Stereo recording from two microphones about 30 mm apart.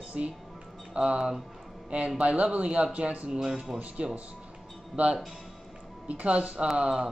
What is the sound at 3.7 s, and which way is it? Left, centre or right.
Speech, centre.